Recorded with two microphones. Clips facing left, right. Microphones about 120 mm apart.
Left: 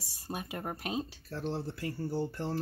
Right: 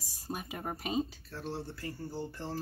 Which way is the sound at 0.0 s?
Centre (ahead or behind).